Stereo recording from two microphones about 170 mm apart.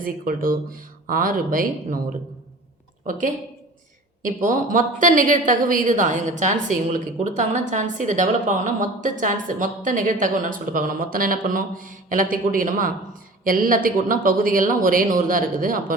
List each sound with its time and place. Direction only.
0.0 s speech: 55° right (ahead or behind)
3.1 s a woman's voice: 50° right (ahead or behind)